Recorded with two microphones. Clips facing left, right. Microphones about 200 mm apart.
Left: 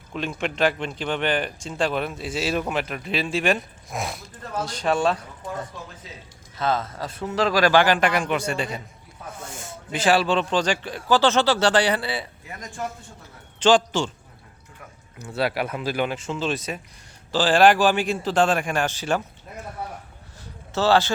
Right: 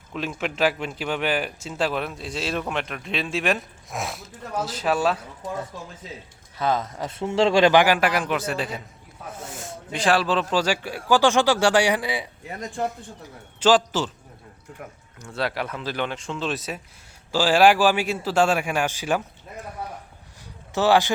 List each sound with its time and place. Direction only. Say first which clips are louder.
0.1 s speech: left 1 dB; centre (ahead or behind)
12.5 s speech: right 7 dB; 30° right (ahead or behind)
13.2 s a man's voice: left 1 dB; 5° right (ahead or behind)
15.4 s speech: left 3 dB; 10° left (ahead or behind); by 19.2 s 10° right (ahead or behind)
20.4 s a sound: right 1 dB; 15° right (ahead or behind)